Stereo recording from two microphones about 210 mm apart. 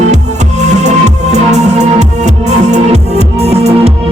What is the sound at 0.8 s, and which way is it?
Music, 35° right (ahead or behind).